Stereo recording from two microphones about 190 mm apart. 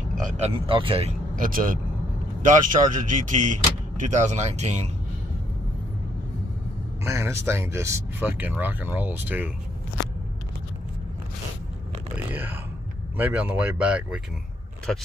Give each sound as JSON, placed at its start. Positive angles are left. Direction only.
{"t": 0.7, "sound": "speech", "side_deg": -30}
{"t": 1.3, "sound": "speech", "side_deg": -45}
{"t": 7.1, "sound": "speech", "side_deg": -15}
{"t": 12.3, "sound": "speech", "side_deg": -10}